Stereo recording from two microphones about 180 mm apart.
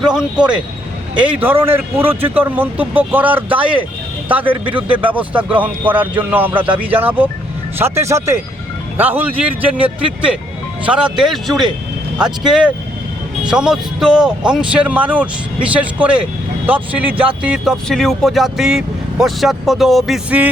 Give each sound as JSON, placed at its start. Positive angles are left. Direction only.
{"t": 0.0, "sound": "a man's voice", "side_deg": -5}
{"t": 10.0, "sound": "speech", "side_deg": -30}
{"t": 10.8, "sound": "a man's voice", "side_deg": -5}